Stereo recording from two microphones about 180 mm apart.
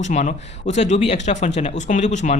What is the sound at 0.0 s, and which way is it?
Speech, 40° left (ahead or behind).